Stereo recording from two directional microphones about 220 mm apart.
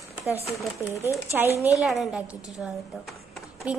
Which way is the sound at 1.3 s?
10° right (ahead or behind).